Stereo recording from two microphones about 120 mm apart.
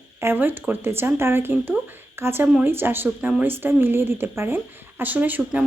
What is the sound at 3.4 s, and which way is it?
A woman's voice, 15° right (ahead or behind).